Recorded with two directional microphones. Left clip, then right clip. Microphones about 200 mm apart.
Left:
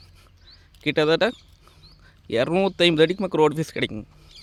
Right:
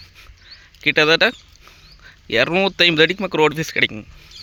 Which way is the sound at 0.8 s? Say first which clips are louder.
Right 6 dB; 5° left (ahead or behind).